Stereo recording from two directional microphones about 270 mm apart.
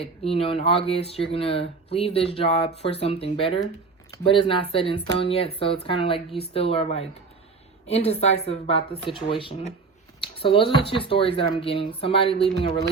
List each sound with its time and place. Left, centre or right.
0.0 s speech: left